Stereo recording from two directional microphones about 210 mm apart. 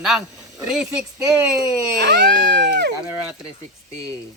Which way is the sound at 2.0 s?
55° right (ahead or behind).